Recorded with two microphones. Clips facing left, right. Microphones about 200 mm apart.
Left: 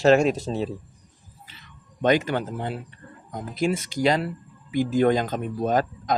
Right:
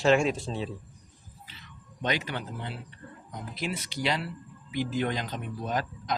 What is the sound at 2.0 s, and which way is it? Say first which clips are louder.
Speech: left 10 dB; 50° left (ahead or behind).